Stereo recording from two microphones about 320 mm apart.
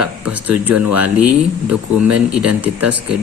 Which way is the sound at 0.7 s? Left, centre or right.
Right.